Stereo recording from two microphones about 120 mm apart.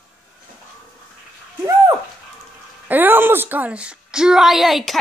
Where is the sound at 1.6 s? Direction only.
25° right (ahead or behind).